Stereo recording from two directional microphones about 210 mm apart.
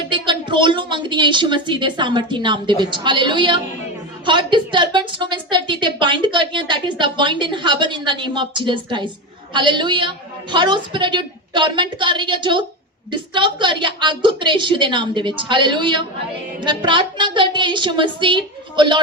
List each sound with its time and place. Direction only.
0.1 s a woman's voice: 20° right (ahead or behind)